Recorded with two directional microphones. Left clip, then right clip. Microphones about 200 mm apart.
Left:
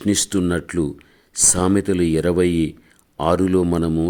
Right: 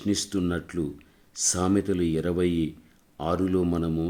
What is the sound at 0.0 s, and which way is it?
Speech, 40° left (ahead or behind).